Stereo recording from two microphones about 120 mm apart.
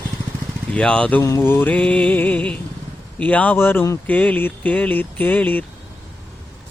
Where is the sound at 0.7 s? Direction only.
10° left (ahead or behind).